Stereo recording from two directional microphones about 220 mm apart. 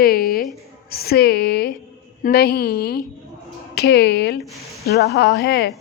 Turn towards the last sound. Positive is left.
turn(degrees=50)  # may be behind; listen again after turning